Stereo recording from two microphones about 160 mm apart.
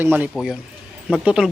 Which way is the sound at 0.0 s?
10° right (ahead or behind).